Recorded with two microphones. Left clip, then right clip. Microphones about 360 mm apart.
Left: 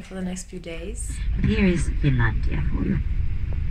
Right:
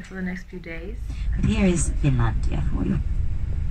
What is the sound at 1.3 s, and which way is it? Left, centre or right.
Speech, centre.